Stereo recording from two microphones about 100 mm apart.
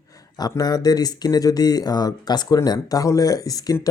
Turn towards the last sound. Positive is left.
turn(degrees=35)  # may be behind; listen again after turning